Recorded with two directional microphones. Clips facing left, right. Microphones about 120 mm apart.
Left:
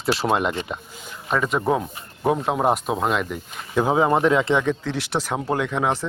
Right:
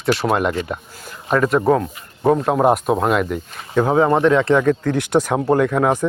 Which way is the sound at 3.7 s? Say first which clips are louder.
Right 3 dB; 10° left (ahead or behind).